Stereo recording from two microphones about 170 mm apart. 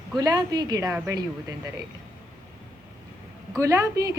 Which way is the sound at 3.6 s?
15° right (ahead or behind).